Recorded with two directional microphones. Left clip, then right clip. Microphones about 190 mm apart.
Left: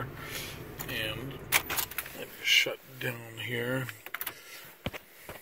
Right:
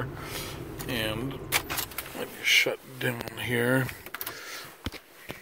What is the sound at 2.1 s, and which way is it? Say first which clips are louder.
Speech: right 2 dB; 15° right (ahead or behind).